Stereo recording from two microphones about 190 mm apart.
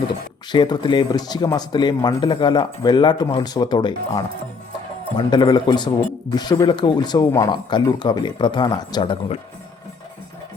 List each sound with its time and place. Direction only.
0.5 s speech: 25° left (ahead or behind)